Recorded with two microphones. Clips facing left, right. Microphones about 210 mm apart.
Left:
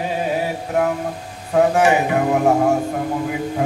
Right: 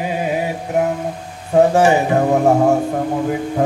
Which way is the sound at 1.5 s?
30° right (ahead or behind).